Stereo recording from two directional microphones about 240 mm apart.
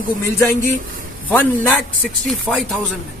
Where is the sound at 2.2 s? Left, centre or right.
Centre.